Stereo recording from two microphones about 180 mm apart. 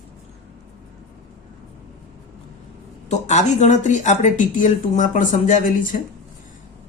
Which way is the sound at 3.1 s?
40° left (ahead or behind).